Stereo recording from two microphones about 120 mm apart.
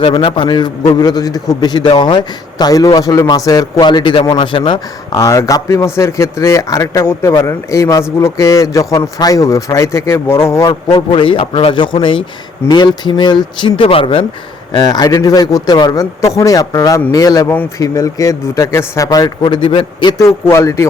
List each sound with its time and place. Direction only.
0.0 s a man's voice: 50° left (ahead or behind)
5.2 s a man's voice: 25° left (ahead or behind)
10.9 s a man's voice: 45° left (ahead or behind)
20.1 s a man's voice: 25° left (ahead or behind)